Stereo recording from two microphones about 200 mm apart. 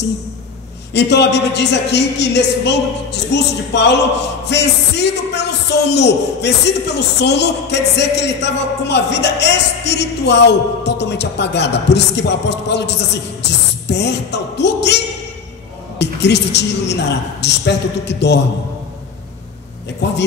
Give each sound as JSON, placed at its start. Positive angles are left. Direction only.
{"t": 0.9, "sound": "a woman's voice", "side_deg": 60}
{"t": 20.0, "sound": "a woman's voice", "side_deg": 55}